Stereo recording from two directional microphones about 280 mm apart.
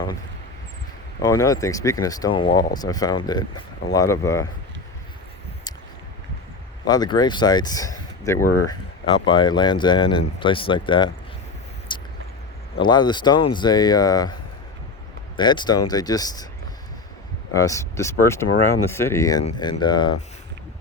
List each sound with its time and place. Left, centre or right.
1.2 s speech: centre
6.8 s speech: centre
11.9 s vehicle: centre
12.8 s speech: centre
15.4 s speech: centre
17.5 s speech: centre